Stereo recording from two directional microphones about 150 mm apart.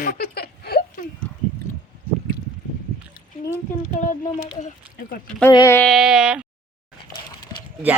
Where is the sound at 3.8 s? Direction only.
60° left (ahead or behind).